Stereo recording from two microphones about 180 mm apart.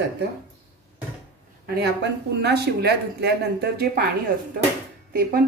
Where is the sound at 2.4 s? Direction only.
65° right (ahead or behind).